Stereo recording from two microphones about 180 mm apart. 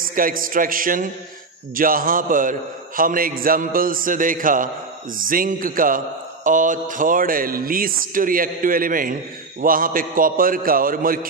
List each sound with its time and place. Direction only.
0.0 s a man's voice: 50° right (ahead or behind)